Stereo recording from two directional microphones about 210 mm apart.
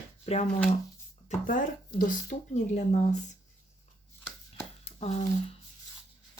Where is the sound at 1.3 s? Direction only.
40° left (ahead or behind).